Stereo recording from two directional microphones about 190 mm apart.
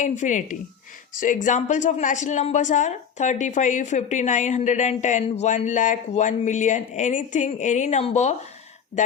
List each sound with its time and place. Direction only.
0.0 s speech: 40° left (ahead or behind)